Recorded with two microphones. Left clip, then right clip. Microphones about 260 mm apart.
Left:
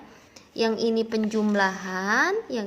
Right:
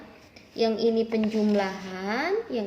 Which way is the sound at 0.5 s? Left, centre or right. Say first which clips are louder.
Even; left.